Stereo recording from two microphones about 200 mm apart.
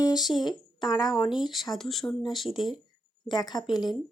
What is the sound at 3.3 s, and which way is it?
Speech, 20° left (ahead or behind).